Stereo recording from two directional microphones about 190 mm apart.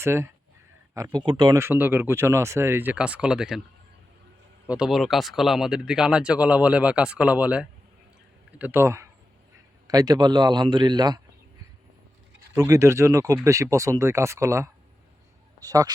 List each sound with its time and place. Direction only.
0.0 s speech: 15° right (ahead or behind)
4.6 s a man's voice: 5° right (ahead or behind); by 11.2 s 20° right (ahead or behind)
12.5 s a man's voice: 15° right (ahead or behind)